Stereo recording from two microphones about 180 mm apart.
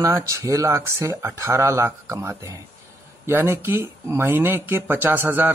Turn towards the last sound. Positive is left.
turn(degrees=-10)  # may be behind; listen again after turning